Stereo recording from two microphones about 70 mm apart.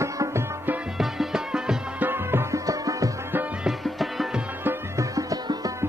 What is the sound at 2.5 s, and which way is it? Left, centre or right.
Music, right.